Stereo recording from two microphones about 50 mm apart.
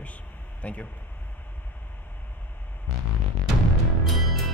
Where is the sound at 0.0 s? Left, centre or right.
Left.